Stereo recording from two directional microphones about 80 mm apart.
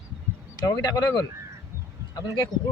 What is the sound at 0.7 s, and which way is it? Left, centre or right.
Speech, left.